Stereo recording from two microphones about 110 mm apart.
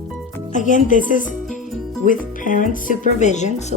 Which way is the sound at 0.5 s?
90° left.